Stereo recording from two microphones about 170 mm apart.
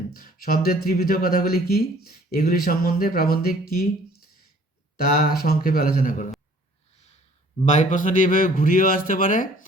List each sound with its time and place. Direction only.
0.1 s speech: 55° left (ahead or behind)
5.2 s speech: 60° left (ahead or behind)
7.6 s speech: 45° left (ahead or behind)